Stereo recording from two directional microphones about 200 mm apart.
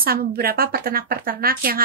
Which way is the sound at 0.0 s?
50° right (ahead or behind).